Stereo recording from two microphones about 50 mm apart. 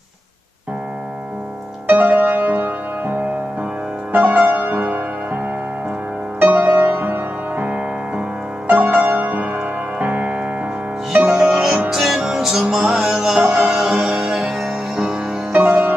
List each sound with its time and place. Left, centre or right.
1.9 s music: right
6.4 s music: right; by 11.6 s centre
11.9 s music: centre
15.5 s music: right